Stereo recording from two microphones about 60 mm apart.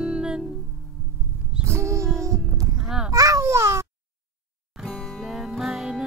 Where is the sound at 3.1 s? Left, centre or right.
Right.